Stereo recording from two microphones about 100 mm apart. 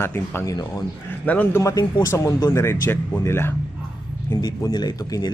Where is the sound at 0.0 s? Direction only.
25° left (ahead or behind).